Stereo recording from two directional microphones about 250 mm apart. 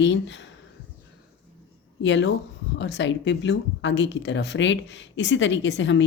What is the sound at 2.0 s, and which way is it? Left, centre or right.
A woman's voice, left.